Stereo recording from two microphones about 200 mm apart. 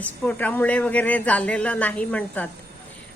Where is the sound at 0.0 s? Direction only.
10° left (ahead or behind).